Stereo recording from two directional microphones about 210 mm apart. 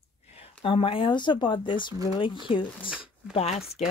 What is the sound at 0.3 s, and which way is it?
Speech, 25° left (ahead or behind).